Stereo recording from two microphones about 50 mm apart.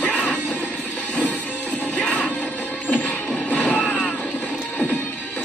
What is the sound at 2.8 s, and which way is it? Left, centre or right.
Music, left.